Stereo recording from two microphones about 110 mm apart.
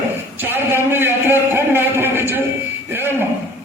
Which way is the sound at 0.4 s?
20° right (ahead or behind).